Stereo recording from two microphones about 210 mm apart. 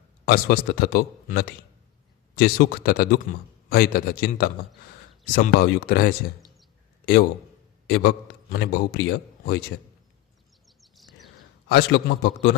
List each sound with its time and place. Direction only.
0.3 s a man's voice: 45° left (ahead or behind)
10.8 s a sound: centre (ahead or behind)
11.7 s a man's voice: 55° left (ahead or behind)